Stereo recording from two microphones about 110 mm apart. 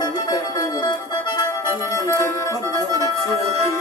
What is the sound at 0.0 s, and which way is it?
Music, 40° left (ahead or behind).